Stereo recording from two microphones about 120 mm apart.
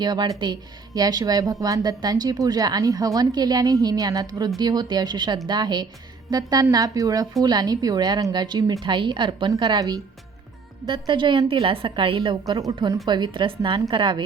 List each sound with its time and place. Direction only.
0.0 s speech: 35° right (ahead or behind)
13.1 s speech: 40° right (ahead or behind)